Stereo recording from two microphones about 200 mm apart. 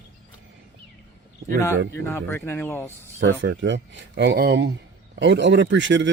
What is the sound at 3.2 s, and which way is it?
A man's voice, 60° right (ahead or behind).